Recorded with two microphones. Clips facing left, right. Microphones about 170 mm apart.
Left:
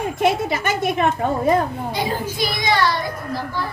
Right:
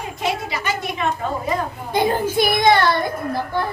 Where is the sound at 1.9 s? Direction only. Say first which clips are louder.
Right 5 dB; 55° right (ahead or behind).